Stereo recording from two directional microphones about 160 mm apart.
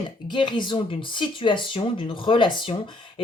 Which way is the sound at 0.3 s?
30° left (ahead or behind).